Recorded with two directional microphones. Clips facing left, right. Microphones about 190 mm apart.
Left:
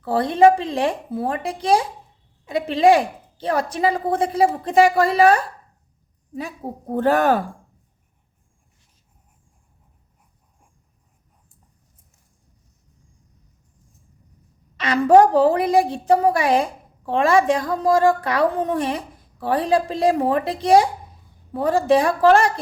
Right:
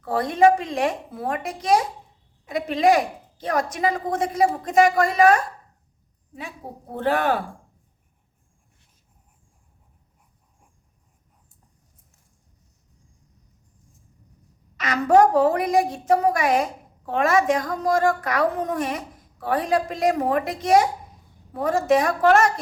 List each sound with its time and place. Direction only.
0.0 s speech: 30° left (ahead or behind)
6.9 s a woman's voice: 45° left (ahead or behind)
14.8 s a woman's voice: 30° left (ahead or behind)